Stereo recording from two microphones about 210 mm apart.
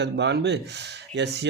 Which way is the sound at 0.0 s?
55° right (ahead or behind).